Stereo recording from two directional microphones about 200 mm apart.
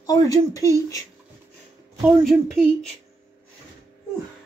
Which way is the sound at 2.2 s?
Centre (ahead or behind).